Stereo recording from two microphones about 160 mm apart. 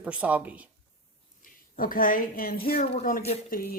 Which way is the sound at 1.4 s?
60° left (ahead or behind).